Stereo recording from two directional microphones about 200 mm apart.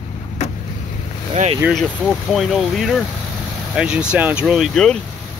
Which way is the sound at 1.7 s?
Centre (ahead or behind).